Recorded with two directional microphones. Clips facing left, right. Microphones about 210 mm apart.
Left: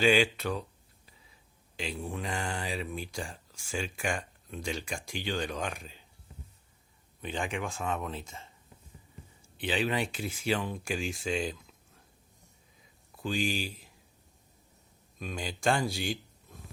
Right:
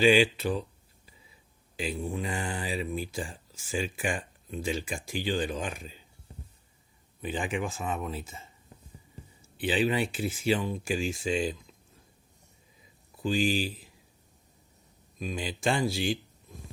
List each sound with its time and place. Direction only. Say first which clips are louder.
1.7 s speech: right 4 dB; 5° right (ahead or behind)
6.3 s a sound: right 3 dB; 35° right (ahead or behind)
7.2 s speech: right 3 dB; 5° right (ahead or behind)
9.6 s speech: right 4 dB; 5° right (ahead or behind)
13.3 s speech: right 5 dB; centre (ahead or behind)
15.2 s speech: right 2 dB; centre (ahead or behind)